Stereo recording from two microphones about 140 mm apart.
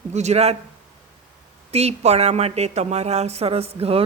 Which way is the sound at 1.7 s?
50° right (ahead or behind).